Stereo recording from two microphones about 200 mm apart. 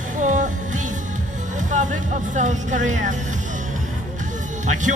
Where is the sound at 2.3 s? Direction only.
40° right (ahead or behind).